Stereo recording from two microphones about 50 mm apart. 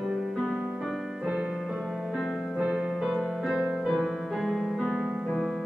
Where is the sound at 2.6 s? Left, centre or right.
Centre.